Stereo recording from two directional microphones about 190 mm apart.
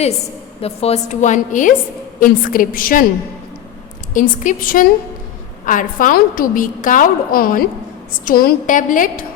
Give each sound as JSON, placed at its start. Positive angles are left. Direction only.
{"t": 0.6, "sound": "a woman's voice", "side_deg": 35}
{"t": 4.1, "sound": "a woman's voice", "side_deg": 45}